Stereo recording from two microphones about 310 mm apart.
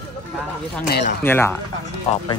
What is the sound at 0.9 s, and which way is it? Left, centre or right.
Speech, left.